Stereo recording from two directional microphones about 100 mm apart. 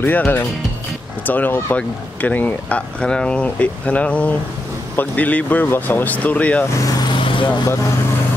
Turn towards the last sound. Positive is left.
turn(degrees=55)  # may be behind; listen again after turning